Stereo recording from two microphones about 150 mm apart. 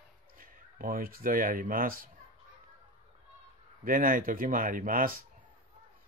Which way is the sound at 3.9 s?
65° right (ahead or behind).